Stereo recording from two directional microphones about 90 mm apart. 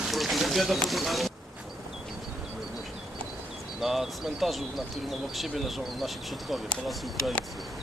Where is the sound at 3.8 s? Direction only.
5° right (ahead or behind).